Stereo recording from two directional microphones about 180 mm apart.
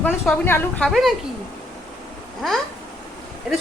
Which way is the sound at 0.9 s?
Centre (ahead or behind).